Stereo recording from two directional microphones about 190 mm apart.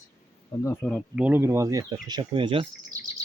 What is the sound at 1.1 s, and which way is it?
Speech, 10° right (ahead or behind).